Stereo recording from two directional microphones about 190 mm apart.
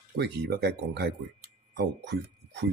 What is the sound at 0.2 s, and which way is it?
Speech, 55° right (ahead or behind).